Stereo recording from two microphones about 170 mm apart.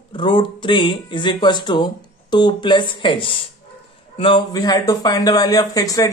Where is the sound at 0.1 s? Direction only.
30° left (ahead or behind).